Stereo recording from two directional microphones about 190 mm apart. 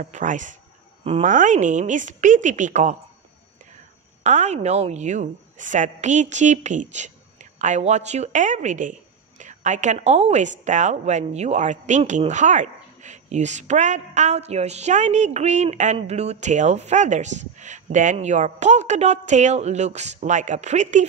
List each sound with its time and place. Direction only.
0.0 s a woman's voice: 40° right (ahead or behind)
4.2 s a woman's voice: 40° right (ahead or behind)